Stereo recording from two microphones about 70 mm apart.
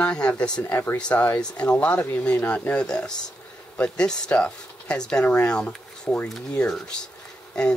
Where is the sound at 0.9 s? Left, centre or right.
Centre.